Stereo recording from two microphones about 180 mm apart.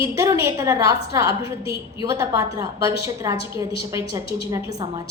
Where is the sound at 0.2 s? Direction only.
20° right (ahead or behind).